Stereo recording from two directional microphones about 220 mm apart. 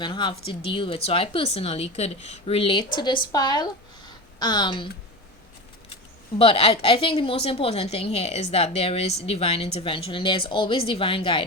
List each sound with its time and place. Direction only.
0.0 s speech: 20° left (ahead or behind)
6.4 s speech: 25° left (ahead or behind)